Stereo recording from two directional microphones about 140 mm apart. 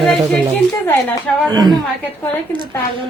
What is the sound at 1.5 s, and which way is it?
Speech, 30° right (ahead or behind).